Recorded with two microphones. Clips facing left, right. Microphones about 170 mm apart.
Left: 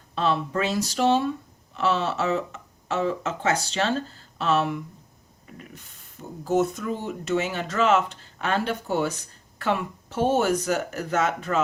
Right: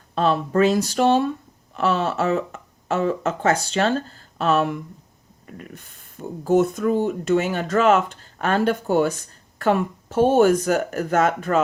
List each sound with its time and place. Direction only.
0.1 s speech: 45° right (ahead or behind)